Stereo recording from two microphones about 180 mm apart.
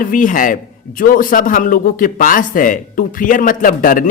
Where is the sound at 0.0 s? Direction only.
50° left (ahead or behind).